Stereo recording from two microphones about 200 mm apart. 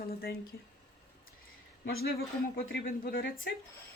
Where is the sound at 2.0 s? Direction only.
50° left (ahead or behind).